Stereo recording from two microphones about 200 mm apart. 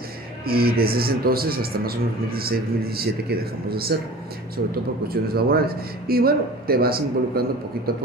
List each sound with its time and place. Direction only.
0.5 s a man's voice: 50° right (ahead or behind)
5.0 s a man's voice: 50° right (ahead or behind)